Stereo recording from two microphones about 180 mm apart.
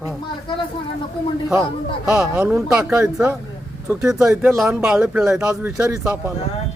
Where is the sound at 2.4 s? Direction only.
10° right (ahead or behind).